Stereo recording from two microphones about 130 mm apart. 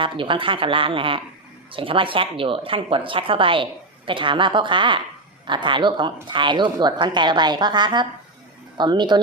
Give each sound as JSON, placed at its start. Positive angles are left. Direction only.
{"t": 0.0, "sound": "speech", "side_deg": -40}